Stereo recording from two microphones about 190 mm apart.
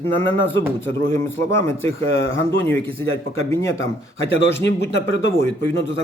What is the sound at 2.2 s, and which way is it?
Speech, 90° left.